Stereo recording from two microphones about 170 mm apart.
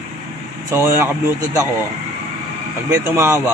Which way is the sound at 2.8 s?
15° right (ahead or behind).